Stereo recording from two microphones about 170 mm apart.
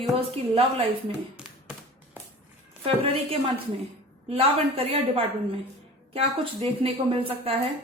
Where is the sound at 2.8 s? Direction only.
35° right (ahead or behind).